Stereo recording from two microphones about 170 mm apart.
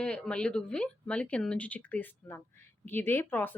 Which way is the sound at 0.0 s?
5° left (ahead or behind).